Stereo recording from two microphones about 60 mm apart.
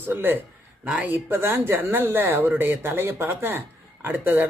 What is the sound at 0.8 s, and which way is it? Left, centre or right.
Speech, centre.